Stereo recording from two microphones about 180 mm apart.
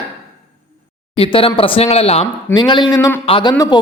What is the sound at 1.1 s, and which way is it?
A man's voice, 30° left (ahead or behind).